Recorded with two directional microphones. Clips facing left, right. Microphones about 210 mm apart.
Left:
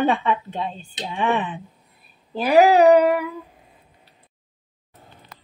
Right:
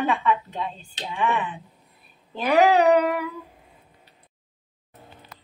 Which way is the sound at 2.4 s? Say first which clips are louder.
Left 4 dB; 10° left (ahead or behind).